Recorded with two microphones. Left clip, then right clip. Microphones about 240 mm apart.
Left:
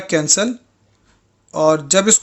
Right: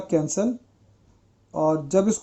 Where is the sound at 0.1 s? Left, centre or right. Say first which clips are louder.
Left 7 dB; left.